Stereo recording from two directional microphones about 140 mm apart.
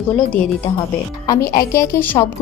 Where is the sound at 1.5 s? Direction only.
20° left (ahead or behind).